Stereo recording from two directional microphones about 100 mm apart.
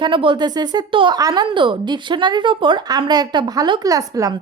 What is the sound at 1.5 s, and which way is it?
A woman's voice, 55° right (ahead or behind).